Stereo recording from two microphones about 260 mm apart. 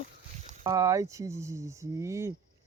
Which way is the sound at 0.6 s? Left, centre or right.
Centre.